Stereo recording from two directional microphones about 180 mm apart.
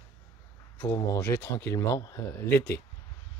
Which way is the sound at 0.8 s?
20° left (ahead or behind).